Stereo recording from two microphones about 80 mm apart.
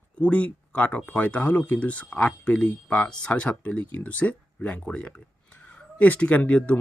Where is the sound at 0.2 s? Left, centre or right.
Centre.